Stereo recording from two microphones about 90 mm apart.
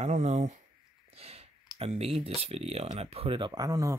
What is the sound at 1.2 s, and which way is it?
Speech, 90° right.